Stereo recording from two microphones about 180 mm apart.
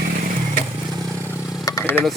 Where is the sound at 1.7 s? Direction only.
15° left (ahead or behind).